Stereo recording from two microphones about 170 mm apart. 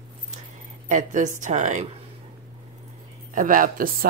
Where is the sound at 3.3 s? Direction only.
55° right (ahead or behind).